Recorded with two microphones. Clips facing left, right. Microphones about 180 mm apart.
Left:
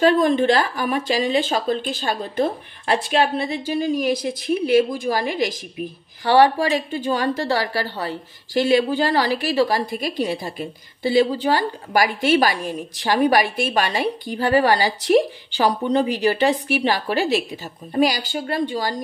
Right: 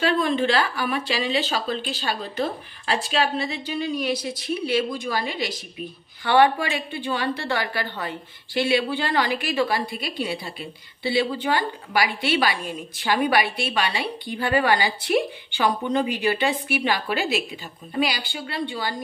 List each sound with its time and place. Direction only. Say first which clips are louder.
0.0 s speech: left 6 dB; 45° left (ahead or behind)